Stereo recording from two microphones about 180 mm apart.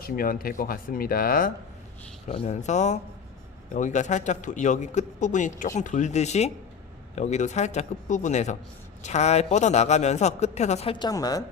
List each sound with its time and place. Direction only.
0.0 s speech: 55° left (ahead or behind)
2.2 s a man's voice: 35° left (ahead or behind); by 11.4 s 20° left (ahead or behind)